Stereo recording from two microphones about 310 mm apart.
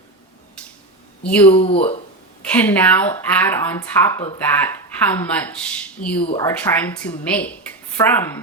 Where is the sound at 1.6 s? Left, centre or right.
Centre.